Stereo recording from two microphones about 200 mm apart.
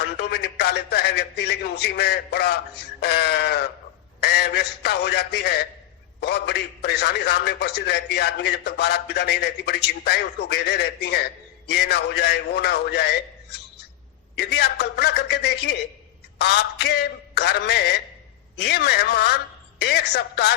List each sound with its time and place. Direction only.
0.0 s a man's voice: 55° left (ahead or behind)